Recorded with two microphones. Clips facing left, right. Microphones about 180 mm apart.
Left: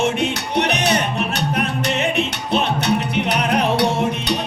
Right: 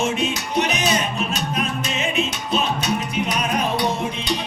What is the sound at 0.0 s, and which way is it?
Music, 65° left (ahead or behind).